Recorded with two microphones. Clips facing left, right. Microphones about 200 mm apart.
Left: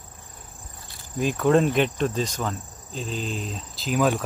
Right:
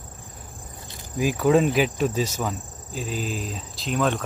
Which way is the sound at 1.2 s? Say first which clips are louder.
Right 1 dB; 5° right (ahead or behind).